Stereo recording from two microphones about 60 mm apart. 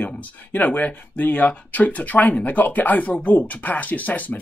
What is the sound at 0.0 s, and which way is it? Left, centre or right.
Speech, left.